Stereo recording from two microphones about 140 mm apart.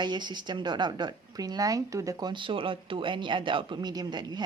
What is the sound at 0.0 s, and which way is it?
Speech, 30° right (ahead or behind).